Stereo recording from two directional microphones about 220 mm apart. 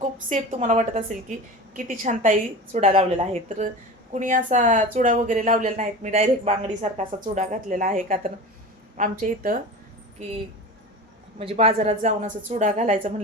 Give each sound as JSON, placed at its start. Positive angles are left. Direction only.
{"t": 0.0, "sound": "speech", "side_deg": -35}
{"t": 11.3, "sound": "a woman's voice", "side_deg": -25}